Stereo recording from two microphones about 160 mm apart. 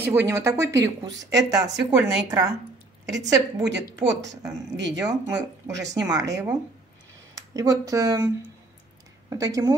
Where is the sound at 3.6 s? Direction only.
90° right.